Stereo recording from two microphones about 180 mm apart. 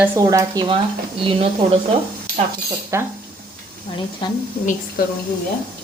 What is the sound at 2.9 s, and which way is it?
Speech, 15° right (ahead or behind).